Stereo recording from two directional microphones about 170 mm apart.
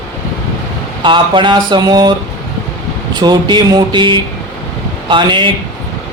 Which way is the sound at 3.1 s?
25° right (ahead or behind).